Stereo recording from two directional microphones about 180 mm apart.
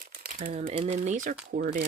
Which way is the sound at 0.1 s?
60° right (ahead or behind).